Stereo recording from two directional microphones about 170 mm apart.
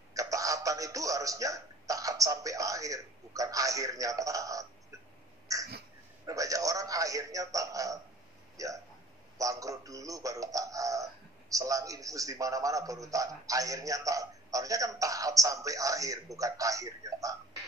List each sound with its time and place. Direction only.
0.1 s speech: 20° right (ahead or behind)
5.5 s a sound: 20° right (ahead or behind)
6.2 s a man's voice: 20° right (ahead or behind)